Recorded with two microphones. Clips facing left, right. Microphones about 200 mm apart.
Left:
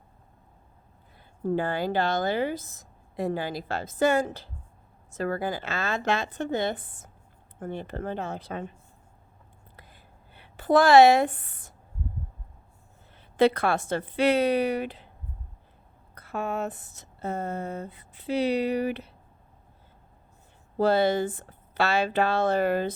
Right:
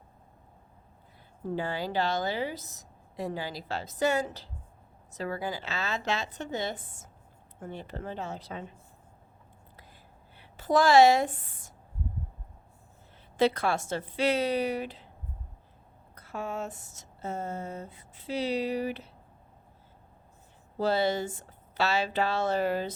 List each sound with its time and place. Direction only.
1.5 s a woman's voice: 55° left (ahead or behind)
9.7 s a sound: 60° left (ahead or behind)
13.3 s speech: 60° left (ahead or behind)
16.1 s speech: 60° left (ahead or behind)
20.7 s speech: 55° left (ahead or behind)